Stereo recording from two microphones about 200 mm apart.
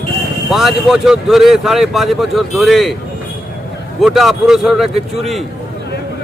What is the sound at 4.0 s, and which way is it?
A man's voice, centre (ahead or behind).